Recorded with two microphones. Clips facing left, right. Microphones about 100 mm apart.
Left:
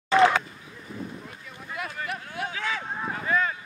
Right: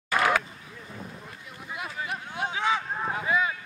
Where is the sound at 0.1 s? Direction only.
25° left (ahead or behind).